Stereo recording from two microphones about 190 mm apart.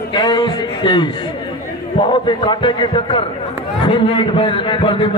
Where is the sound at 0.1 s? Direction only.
20° left (ahead or behind).